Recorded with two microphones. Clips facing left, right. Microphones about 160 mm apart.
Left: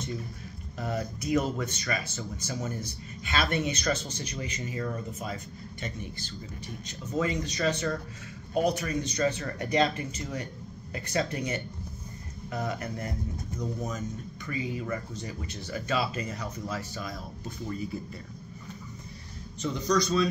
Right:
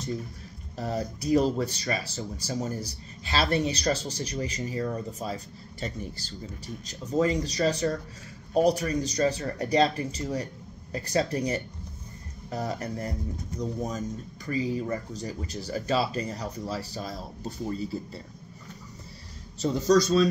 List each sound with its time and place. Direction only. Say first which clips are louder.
0.7 s speech: right 2 dB; 35° right (ahead or behind)
19.6 s speech: right 5 dB; 40° right (ahead or behind)